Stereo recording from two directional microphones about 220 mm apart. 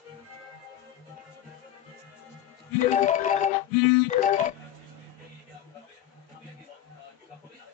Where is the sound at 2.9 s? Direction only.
35° left (ahead or behind).